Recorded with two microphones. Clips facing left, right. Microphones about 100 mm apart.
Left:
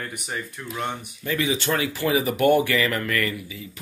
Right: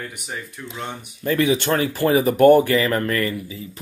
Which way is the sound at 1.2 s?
55° right (ahead or behind).